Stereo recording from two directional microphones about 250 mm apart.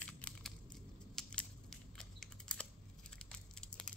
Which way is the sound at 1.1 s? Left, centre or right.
Centre.